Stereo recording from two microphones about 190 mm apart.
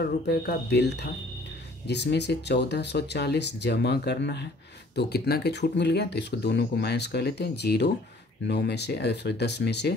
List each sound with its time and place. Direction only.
0.0 s speech: 55° left (ahead or behind)